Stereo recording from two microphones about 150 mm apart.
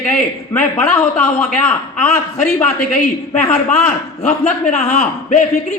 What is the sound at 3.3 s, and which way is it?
Speech, 10° left (ahead or behind).